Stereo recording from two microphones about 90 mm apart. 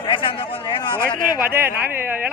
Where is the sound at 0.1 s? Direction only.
75° left (ahead or behind).